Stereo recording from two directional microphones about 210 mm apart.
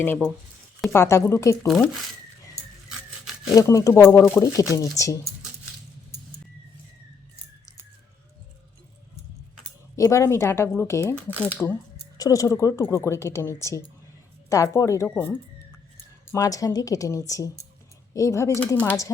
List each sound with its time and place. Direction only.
0.9 s speech: 10° left (ahead or behind)
1.6 s speech: centre (ahead or behind)
3.5 s speech: 15° left (ahead or behind)
9.9 s speech: 15° left (ahead or behind)